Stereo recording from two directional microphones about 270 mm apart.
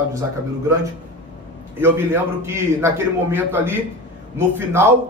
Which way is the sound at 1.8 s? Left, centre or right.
Centre.